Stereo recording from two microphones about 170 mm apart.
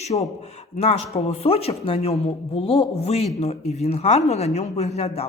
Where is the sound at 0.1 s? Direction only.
30° left (ahead or behind).